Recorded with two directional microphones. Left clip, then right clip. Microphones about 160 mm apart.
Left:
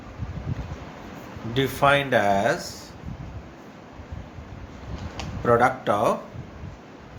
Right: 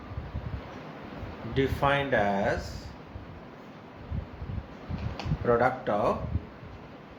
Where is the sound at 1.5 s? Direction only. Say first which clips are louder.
Left 6 dB; 65° left (ahead or behind).